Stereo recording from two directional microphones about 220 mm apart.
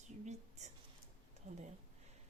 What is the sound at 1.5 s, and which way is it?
Speech, 30° right (ahead or behind).